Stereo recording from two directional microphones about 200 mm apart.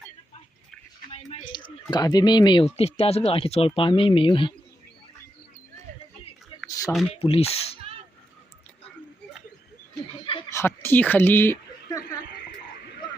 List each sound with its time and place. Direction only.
1.1 s speech: 25° left (ahead or behind)
6.7 s a sound: 20° left (ahead or behind)
7.1 s speech: 30° left (ahead or behind)
10.5 s speech: 10° left (ahead or behind)
12.4 s frog: 55° left (ahead or behind)